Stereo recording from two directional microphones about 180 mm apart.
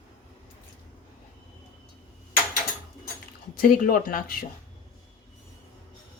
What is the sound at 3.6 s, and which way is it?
Speech, 50° left (ahead or behind).